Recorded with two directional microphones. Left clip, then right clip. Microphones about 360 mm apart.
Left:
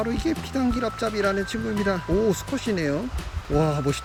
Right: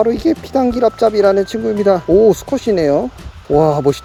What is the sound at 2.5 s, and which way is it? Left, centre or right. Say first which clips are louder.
Speech: right 12 dB; centre.